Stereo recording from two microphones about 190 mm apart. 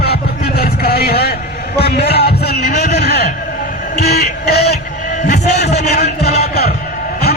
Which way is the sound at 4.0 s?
55° left (ahead or behind).